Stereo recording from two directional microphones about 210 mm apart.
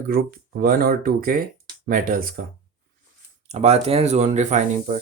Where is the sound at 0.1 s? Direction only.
45° right (ahead or behind).